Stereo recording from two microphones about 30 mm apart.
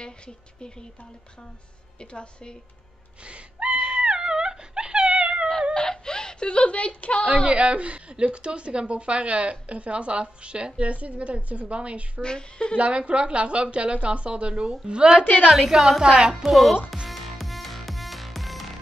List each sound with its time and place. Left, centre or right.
2.0 s a woman's voice: left
3.3 s a sound: right
4.0 s dog: right
5.8 s a sound: left
7.4 s a woman's voice: right
10.8 s a woman's voice: right
12.2 s a woman's voice: left
12.7 s a woman's voice: right
15.1 s a woman's voice: left
16.0 s speech: right
16.4 s speech: centre
17.1 s music: centre